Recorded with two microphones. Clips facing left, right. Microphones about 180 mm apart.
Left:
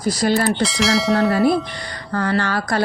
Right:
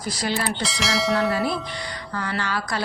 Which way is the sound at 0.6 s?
Centre (ahead or behind).